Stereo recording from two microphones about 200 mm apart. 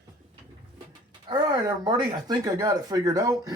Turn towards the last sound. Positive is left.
turn(degrees=-20)  # may be behind; listen again after turning